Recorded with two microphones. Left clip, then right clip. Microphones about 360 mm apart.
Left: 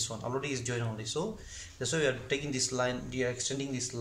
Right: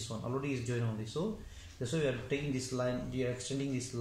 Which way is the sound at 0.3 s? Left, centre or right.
Left.